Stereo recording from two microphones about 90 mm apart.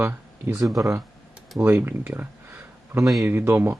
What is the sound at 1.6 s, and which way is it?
Speech, 20° right (ahead or behind).